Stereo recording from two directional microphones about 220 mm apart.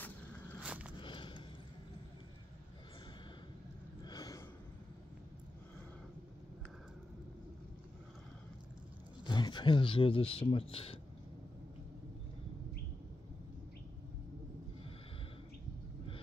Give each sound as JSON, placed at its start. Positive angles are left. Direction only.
{"t": 0.6, "sound": "walk", "side_deg": -5}
{"t": 1.0, "sound": "a sound", "side_deg": 20}
{"t": 4.0, "sound": "gasp", "side_deg": 15}
{"t": 9.2, "sound": "speech", "side_deg": 20}